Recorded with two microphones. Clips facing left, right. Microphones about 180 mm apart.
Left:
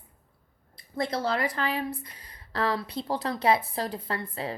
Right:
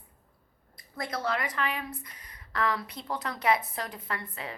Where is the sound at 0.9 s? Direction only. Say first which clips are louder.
Left 4 dB; 30° left (ahead or behind).